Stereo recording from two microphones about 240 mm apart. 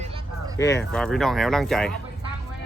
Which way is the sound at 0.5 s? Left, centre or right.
Centre.